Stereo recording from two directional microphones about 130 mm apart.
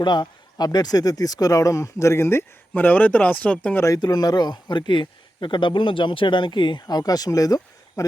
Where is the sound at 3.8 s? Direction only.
30° left (ahead or behind).